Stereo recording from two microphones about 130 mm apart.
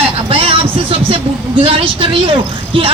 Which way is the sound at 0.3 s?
45° right (ahead or behind).